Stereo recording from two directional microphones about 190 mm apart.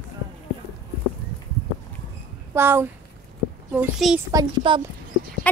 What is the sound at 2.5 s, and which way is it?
A child's voice, 10° right (ahead or behind).